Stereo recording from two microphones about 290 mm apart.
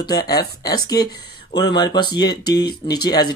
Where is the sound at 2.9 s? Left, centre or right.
Centre.